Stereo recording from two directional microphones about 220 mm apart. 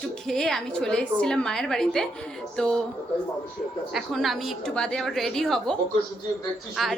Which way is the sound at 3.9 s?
Centre (ahead or behind).